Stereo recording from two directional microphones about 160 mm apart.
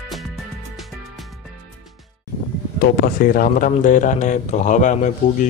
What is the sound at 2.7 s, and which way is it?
Speech, 65° left (ahead or behind).